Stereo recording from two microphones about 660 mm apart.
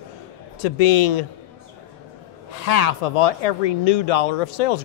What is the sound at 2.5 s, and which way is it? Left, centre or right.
Speech, left.